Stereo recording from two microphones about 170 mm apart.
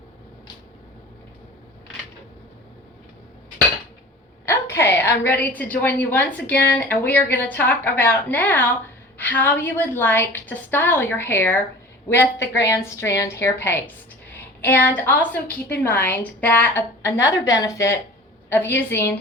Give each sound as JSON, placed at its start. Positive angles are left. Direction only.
{"t": 4.4, "sound": "a woman's voice", "side_deg": 15}